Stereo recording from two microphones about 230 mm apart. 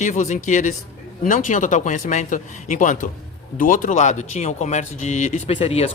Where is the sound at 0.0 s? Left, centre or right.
Left.